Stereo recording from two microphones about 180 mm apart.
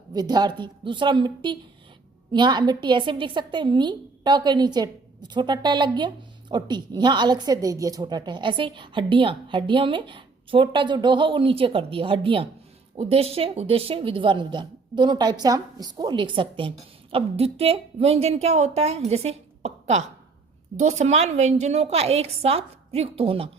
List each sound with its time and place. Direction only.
0.1 s a woman's voice: 20° right (ahead or behind)